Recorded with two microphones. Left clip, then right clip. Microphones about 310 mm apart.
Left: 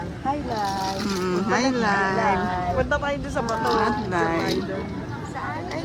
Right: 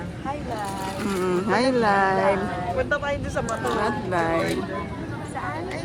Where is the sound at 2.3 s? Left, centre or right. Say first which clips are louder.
Left 2 dB; left.